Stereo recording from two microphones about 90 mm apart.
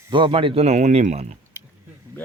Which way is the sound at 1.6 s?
25° right (ahead or behind).